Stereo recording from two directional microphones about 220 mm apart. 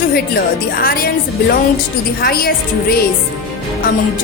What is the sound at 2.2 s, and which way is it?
Speech, 40° left (ahead or behind).